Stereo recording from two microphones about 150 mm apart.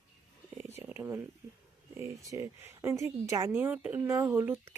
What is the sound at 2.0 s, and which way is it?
A woman's voice, 20° right (ahead or behind).